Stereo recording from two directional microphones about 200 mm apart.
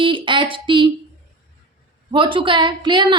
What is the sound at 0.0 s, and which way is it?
Speech, 25° right (ahead or behind).